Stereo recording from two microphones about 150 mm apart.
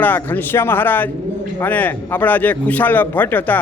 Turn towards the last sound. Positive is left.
turn(degrees=10)  # may be behind; listen again after turning